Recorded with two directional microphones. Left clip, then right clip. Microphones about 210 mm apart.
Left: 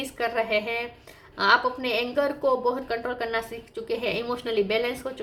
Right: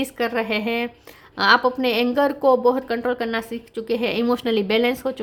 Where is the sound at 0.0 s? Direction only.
45° right (ahead or behind).